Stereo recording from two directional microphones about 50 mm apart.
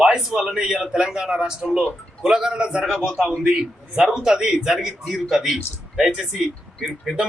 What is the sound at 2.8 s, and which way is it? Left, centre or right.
Speech, centre.